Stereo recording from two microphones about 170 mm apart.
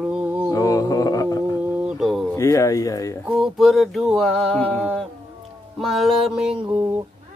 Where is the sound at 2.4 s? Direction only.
20° left (ahead or behind).